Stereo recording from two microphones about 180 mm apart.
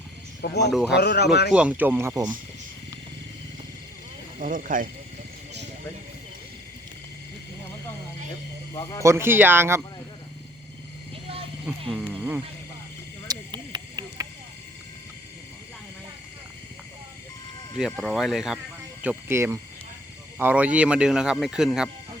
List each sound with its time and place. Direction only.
0.7 s speech: centre (ahead or behind)
0.9 s speech: 65° left (ahead or behind)
1.5 s speech: 5° right (ahead or behind)
4.4 s speech: 50° right (ahead or behind)
8.7 s speech: 20° left (ahead or behind)
9.0 s speech: 15° right (ahead or behind)
11.1 s vehicle: 30° right (ahead or behind)
11.6 s a sound: 5° right (ahead or behind)
13.3 s a sound: 20° right (ahead or behind)
17.7 s speech: centre (ahead or behind)
19.0 s speech: 15° right (ahead or behind)